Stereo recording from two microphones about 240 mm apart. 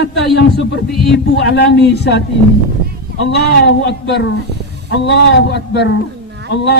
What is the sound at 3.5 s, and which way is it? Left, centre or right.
A man's voice, left.